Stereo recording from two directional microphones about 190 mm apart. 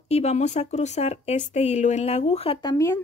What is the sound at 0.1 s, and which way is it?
Speech, 35° left (ahead or behind).